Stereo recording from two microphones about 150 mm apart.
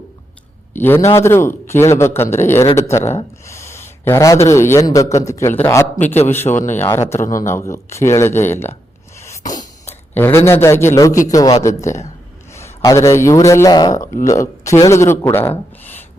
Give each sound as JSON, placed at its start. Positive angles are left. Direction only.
{"t": 0.7, "sound": "a man's voice", "side_deg": 15}
{"t": 9.2, "sound": "a sound", "side_deg": 20}
{"t": 9.8, "sound": "a man's voice", "side_deg": 15}